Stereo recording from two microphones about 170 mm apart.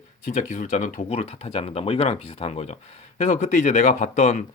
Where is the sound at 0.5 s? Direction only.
45° left (ahead or behind).